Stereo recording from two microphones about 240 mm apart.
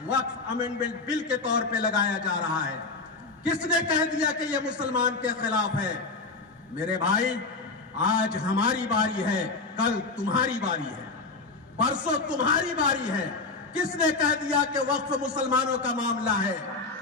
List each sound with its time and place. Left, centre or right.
0.8 s a man's voice: centre